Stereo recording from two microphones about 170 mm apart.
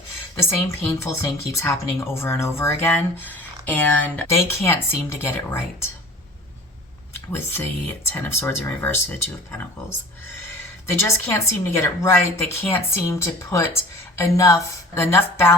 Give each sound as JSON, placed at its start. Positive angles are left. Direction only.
{"t": 0.3, "sound": "speech", "side_deg": 15}
{"t": 7.3, "sound": "speech", "side_deg": 15}
{"t": 10.8, "sound": "speech", "side_deg": 15}